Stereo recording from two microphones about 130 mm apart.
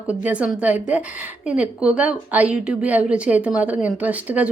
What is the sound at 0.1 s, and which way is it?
A woman's voice, 10° right (ahead or behind).